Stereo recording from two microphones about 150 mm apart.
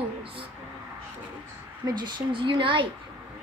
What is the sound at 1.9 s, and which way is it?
Speech, 30° right (ahead or behind).